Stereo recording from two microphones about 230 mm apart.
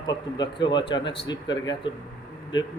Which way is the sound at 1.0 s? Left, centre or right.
Left.